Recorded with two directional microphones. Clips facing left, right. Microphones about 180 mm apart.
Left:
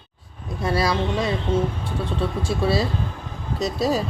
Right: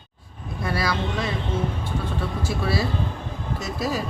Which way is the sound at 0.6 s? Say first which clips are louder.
Left 4 dB; 30° left (ahead or behind).